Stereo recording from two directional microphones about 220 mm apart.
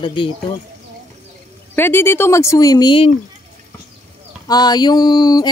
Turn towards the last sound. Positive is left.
turn(degrees=20)  # may be behind; listen again after turning